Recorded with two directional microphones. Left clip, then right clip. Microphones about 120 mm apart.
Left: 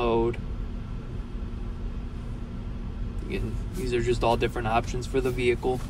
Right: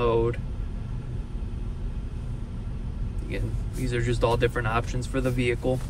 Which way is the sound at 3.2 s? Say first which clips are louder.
Left 1 dB; 40° left (ahead or behind).